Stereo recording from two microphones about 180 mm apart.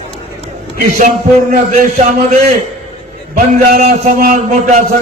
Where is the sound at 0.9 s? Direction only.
45° right (ahead or behind).